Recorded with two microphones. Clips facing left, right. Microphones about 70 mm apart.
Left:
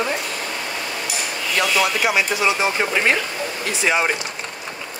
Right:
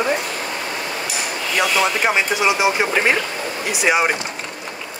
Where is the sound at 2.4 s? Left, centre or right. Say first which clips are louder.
Right 2 dB; centre.